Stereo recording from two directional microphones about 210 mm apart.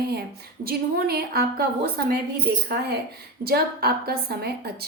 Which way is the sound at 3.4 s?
50° right (ahead or behind).